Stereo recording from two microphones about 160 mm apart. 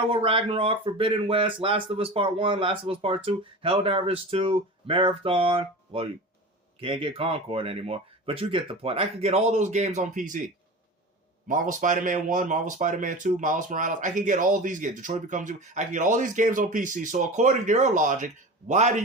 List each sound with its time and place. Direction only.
0.1 s speech: 35° right (ahead or behind)